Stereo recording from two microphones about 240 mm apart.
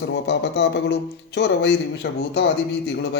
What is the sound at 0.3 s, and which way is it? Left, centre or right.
A man's voice, left.